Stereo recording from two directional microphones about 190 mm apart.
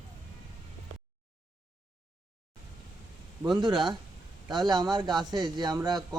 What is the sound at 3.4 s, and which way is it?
A man's voice, 25° right (ahead or behind).